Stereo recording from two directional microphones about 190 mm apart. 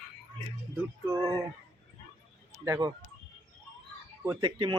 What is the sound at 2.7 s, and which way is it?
Speech, 20° right (ahead or behind).